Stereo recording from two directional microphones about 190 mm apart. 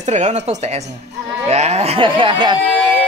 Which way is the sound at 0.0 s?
40° right (ahead or behind).